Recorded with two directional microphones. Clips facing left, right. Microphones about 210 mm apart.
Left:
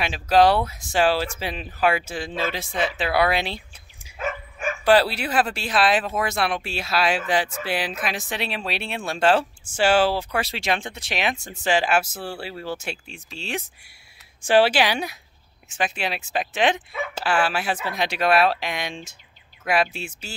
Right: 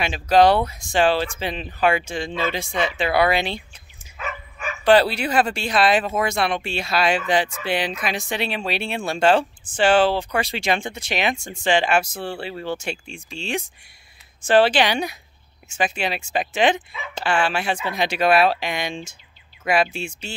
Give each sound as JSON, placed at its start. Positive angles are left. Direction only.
{"t": 0.0, "sound": "speech", "side_deg": 0}
{"t": 4.2, "sound": "dog", "side_deg": 50}
{"t": 4.8, "sound": "speech", "side_deg": 5}